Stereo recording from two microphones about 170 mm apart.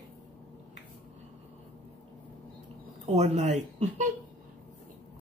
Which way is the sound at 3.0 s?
40° right (ahead or behind).